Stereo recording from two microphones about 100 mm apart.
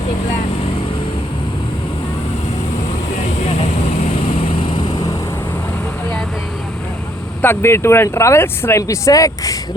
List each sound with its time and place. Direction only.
7.4 s speech: 25° left (ahead or behind)